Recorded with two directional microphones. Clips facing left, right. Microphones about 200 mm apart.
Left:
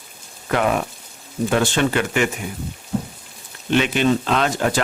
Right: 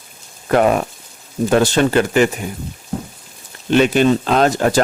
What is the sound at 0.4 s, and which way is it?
Speech, 40° right (ahead or behind).